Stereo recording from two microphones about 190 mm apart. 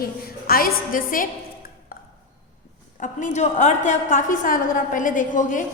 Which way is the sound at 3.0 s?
40° left (ahead or behind).